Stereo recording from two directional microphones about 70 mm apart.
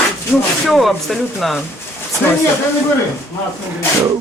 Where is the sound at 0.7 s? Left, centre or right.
Centre.